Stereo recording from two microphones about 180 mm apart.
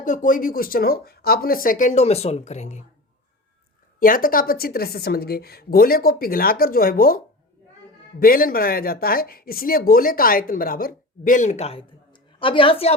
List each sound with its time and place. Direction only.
0.0 s speech: 45° left (ahead or behind)
4.0 s a woman's voice: 50° left (ahead or behind)
8.2 s speech: 55° left (ahead or behind); by 12.9 s 30° left (ahead or behind)